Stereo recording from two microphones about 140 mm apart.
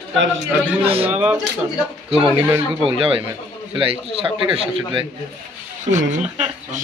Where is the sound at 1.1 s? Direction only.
10° right (ahead or behind).